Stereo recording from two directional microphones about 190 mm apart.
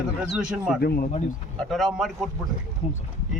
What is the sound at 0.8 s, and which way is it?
Speech, 55° left (ahead or behind).